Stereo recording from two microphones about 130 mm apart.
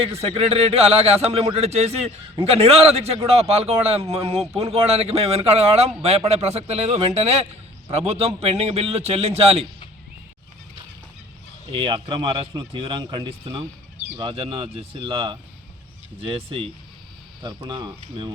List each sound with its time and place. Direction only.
0.0 s a man's voice: 50° right (ahead or behind)
11.7 s a man's voice: 40° right (ahead or behind)